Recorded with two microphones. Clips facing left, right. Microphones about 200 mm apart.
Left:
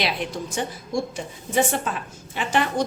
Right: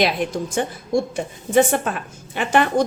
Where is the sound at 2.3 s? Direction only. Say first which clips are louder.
Right 5 dB; 55° right (ahead or behind).